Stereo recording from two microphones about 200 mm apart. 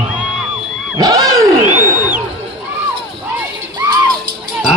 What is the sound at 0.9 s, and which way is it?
Roaring cats, 15° right (ahead or behind).